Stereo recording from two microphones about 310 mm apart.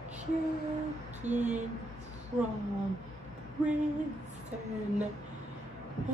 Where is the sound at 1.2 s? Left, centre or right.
Right.